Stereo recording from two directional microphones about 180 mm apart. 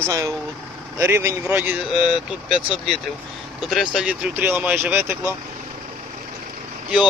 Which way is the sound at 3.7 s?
Centre (ahead or behind).